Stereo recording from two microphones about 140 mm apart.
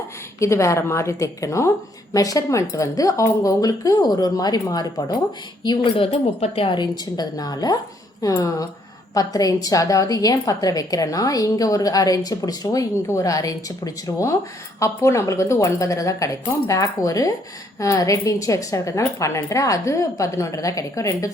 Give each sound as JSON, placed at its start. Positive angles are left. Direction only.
{"t": 0.3, "sound": "a woman's voice", "side_deg": 20}